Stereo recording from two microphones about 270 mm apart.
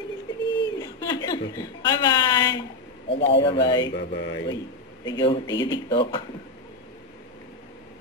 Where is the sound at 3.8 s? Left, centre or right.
Left.